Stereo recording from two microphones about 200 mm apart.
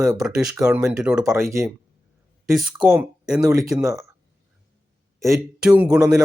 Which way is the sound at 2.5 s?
5° right (ahead or behind).